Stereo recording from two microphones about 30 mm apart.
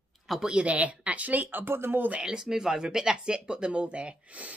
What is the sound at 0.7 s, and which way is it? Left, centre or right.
A woman's voice, right.